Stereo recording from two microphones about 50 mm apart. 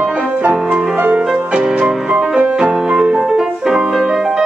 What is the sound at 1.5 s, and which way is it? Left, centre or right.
Music, centre.